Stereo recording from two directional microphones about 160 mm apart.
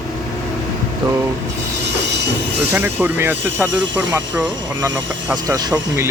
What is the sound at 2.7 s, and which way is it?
Speech, 15° right (ahead or behind).